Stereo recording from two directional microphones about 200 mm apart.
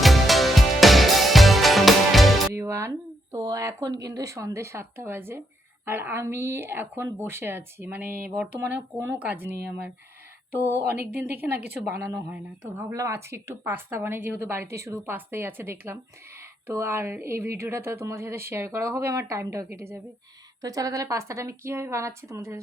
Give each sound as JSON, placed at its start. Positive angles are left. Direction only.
{"t": 0.0, "sound": "music", "side_deg": 0}
{"t": 2.6, "sound": "music", "side_deg": -15}
{"t": 3.3, "sound": "a woman's voice", "side_deg": -15}
{"t": 9.5, "sound": "speech", "side_deg": -55}
{"t": 10.6, "sound": "a woman's voice", "side_deg": 10}
{"t": 10.8, "sound": "speech", "side_deg": -50}
{"t": 11.1, "sound": "a woman's voice", "side_deg": -10}